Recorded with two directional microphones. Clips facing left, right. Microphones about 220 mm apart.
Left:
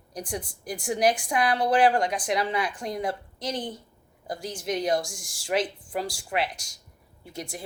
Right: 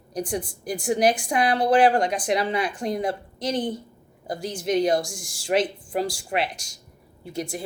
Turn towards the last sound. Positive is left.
turn(degrees=-25)  # may be behind; listen again after turning